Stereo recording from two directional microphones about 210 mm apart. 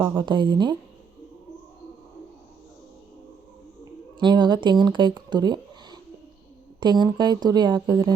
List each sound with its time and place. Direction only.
0.2 s speech: 20° right (ahead or behind)
4.2 s speech: 20° right (ahead or behind)